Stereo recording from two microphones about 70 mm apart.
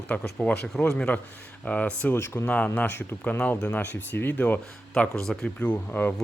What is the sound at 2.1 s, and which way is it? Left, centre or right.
Speech, left.